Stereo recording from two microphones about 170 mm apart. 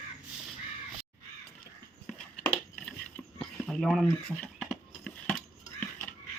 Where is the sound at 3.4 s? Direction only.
Centre (ahead or behind).